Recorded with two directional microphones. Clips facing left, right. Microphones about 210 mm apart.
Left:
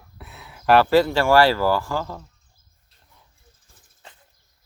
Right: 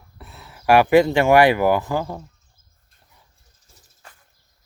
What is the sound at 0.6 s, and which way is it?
Speech, 15° right (ahead or behind).